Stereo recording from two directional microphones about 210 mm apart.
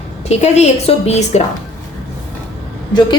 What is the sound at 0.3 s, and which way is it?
A woman's voice, 30° left (ahead or behind).